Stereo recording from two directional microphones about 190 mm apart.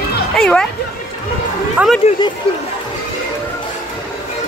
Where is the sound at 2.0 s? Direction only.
35° left (ahead or behind).